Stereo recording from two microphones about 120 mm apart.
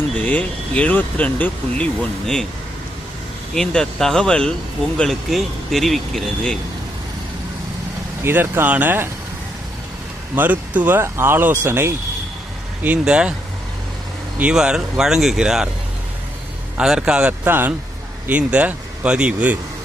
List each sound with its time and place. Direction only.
0.2 s speech: 10° left (ahead or behind)
3.5 s speech: 5° left (ahead or behind)
8.2 s speech: 20° right (ahead or behind)
10.3 s speech: 15° right (ahead or behind)
14.3 s speech: 10° right (ahead or behind)
16.7 s speech: 5° right (ahead or behind)